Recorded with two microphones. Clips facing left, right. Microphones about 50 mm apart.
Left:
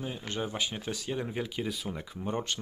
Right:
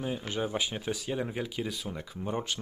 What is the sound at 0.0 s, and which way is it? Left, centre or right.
Speech, centre.